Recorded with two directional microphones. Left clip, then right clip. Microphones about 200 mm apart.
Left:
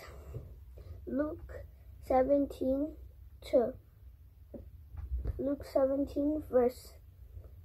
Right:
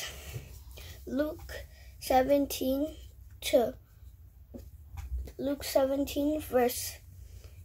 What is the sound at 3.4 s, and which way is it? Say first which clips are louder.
Speech: right 3 dB; 25° right (ahead or behind).